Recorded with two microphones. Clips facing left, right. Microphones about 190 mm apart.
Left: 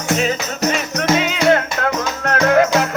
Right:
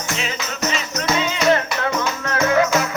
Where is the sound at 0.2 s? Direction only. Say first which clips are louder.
Left 6 dB; 50° left (ahead or behind).